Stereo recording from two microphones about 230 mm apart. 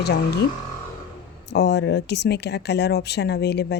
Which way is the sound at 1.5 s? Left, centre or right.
Left.